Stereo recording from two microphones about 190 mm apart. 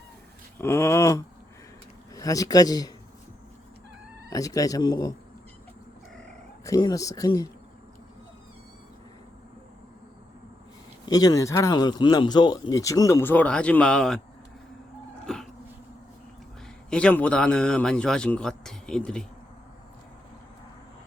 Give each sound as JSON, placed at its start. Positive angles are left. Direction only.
{"t": 0.6, "sound": "a man's voice", "side_deg": 15}
{"t": 4.3, "sound": "speech", "side_deg": 20}
{"t": 6.7, "sound": "a man's voice", "side_deg": 20}
{"t": 11.0, "sound": "a man's voice", "side_deg": 20}
{"t": 15.3, "sound": "a sound", "side_deg": 5}
{"t": 16.9, "sound": "speech", "side_deg": 5}